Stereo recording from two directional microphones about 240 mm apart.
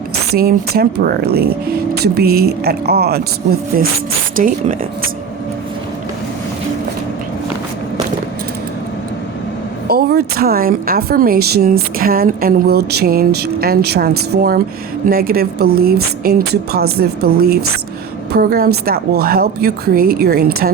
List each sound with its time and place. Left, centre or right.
0.3 s speech: right
9.8 s speech: right